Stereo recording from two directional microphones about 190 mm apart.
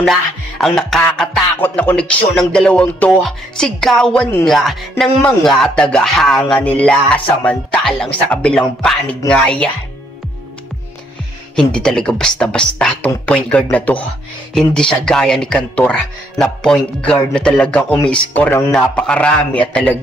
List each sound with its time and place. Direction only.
0.0 s music: centre (ahead or behind)
1.1 s speech: 5° left (ahead or behind)
11.5 s speech: 5° left (ahead or behind)